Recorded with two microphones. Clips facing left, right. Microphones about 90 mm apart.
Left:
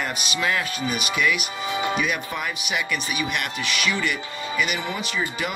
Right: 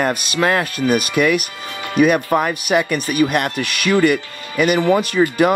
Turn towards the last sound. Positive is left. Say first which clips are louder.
# right 12 dB
turn(degrees=-50)  # may be behind; listen again after turning